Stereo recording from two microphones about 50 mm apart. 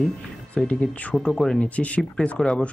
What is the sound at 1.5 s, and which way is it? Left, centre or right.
Speech, left.